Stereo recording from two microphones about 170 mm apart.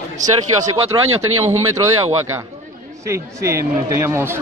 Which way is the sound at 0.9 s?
20° right (ahead or behind).